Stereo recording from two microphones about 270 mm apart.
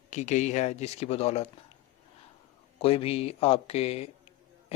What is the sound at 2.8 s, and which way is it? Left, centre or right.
Speech, left.